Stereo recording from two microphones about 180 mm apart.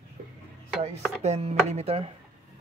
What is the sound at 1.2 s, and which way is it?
Speech, 35° right (ahead or behind).